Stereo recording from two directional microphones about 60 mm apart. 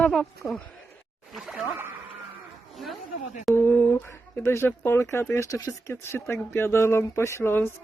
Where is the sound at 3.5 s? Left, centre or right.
Left.